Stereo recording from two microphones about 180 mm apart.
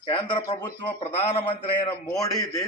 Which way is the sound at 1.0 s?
35° left (ahead or behind).